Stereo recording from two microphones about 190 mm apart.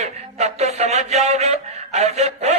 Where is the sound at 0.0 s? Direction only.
35° right (ahead or behind).